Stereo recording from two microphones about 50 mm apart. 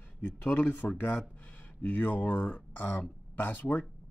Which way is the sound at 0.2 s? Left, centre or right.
Left.